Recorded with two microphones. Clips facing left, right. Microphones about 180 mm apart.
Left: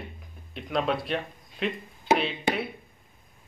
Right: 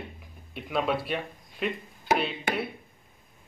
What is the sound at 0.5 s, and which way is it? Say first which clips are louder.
Speech: left 1 dB; 5° right (ahead or behind).